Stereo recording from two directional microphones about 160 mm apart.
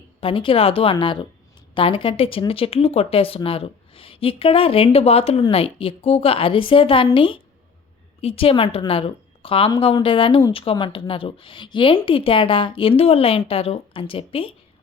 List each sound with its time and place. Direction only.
0.2 s speech: 35° left (ahead or behind)